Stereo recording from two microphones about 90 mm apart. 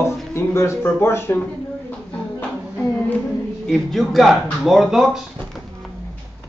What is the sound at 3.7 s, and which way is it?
Speech, 5° left (ahead or behind).